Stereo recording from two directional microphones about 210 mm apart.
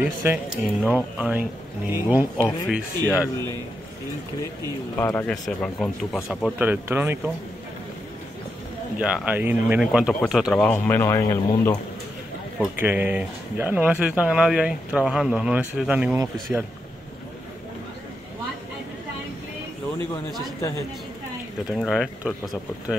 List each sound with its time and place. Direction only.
0.0 s speech: 10° right (ahead or behind)
3.3 s speech: 20° right (ahead or behind)
4.9 s speech: 10° left (ahead or behind); by 7.2 s 10° right (ahead or behind)
9.0 s speech: 5° right (ahead or behind); by 11.8 s 10° left (ahead or behind)
12.5 s speech: 10° right (ahead or behind)
20.0 s speech: 20° right (ahead or behind)
21.6 s speech: centre (ahead or behind)